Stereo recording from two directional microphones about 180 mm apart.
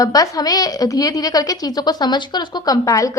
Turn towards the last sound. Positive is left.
turn(degrees=20)  # may be behind; listen again after turning